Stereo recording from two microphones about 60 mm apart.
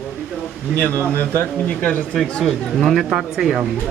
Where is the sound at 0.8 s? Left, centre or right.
Left.